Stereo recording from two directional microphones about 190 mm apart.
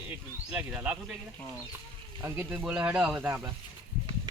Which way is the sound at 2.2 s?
10° right (ahead or behind).